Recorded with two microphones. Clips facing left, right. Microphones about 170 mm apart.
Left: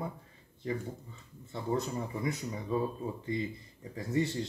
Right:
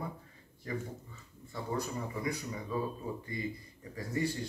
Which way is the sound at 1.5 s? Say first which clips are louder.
Left 3 dB; 25° left (ahead or behind).